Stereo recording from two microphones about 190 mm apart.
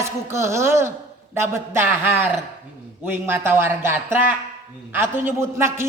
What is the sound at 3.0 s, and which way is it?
A man's voice, 10° right (ahead or behind).